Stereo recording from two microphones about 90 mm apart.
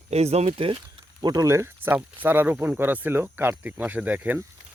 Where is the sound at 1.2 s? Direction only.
45° right (ahead or behind).